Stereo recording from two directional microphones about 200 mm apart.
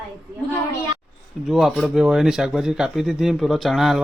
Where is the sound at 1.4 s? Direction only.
Centre (ahead or behind).